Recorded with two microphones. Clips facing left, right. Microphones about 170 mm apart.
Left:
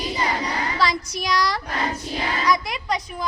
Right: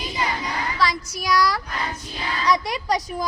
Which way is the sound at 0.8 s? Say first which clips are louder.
Even; centre (ahead or behind).